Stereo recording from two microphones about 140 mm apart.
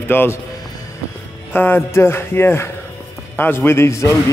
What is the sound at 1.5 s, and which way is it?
A man's voice, 15° left (ahead or behind).